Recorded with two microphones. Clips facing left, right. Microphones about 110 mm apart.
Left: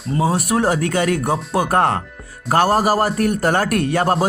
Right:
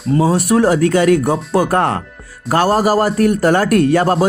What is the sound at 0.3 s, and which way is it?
Speech, 45° left (ahead or behind).